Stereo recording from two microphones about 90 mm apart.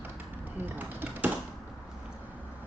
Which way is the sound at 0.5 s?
25° right (ahead or behind).